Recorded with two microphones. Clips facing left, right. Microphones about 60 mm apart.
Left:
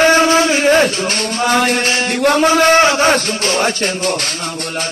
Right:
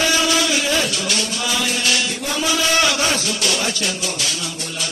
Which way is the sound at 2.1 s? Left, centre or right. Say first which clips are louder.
Left 11 dB; left.